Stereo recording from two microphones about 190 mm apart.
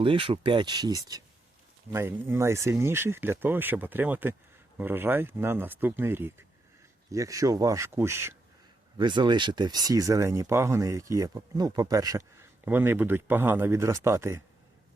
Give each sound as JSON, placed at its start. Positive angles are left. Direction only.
{"t": 0.0, "sound": "speech", "side_deg": -25}
{"t": 9.0, "sound": "speech", "side_deg": -25}